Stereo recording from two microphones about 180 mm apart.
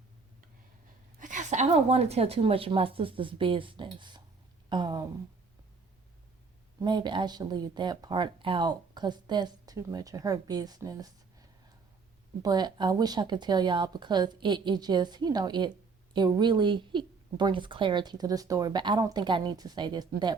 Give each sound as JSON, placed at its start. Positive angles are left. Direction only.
{"t": 1.2, "sound": "a woman's voice", "side_deg": -45}
{"t": 6.8, "sound": "speech", "side_deg": -25}